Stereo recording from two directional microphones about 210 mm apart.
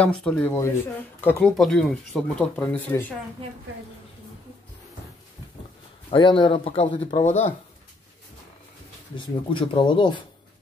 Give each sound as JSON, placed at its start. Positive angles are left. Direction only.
{"t": 0.0, "sound": "speech", "side_deg": 5}
{"t": 6.0, "sound": "speech", "side_deg": 25}
{"t": 9.1, "sound": "speech", "side_deg": 25}